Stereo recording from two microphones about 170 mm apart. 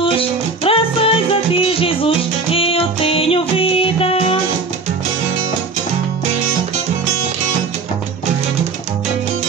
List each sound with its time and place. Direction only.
0.0 s music: 30° left (ahead or behind)